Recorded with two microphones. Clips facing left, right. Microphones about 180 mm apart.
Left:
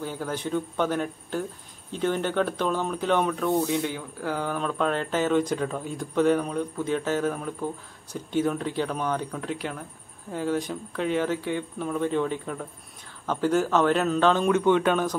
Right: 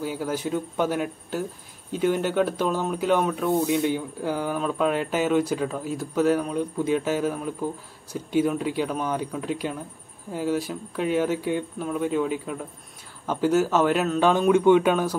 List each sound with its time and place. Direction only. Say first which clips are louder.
0.0 s speech: right 3 dB; 10° right (ahead or behind)
3.6 s speech: right 4 dB; 15° right (ahead or behind)